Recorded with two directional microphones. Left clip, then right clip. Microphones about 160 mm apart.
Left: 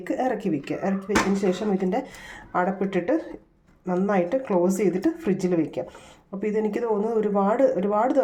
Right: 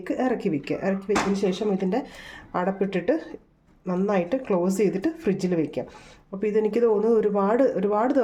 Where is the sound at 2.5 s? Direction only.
30° right (ahead or behind).